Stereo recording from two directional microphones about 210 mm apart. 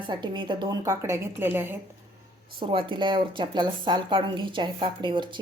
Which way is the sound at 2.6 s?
25° right (ahead or behind).